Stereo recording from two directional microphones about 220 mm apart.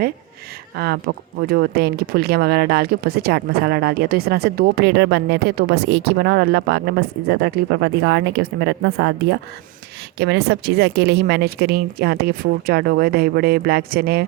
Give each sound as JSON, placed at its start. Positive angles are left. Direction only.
{"t": 0.8, "sound": "speech", "side_deg": -45}